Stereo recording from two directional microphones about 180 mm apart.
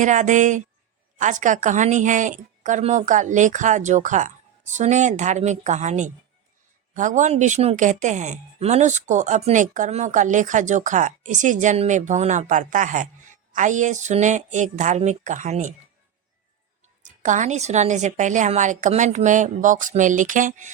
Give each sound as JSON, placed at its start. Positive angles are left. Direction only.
{"t": 0.0, "sound": "speech", "side_deg": -45}
{"t": 17.0, "sound": "speech", "side_deg": -45}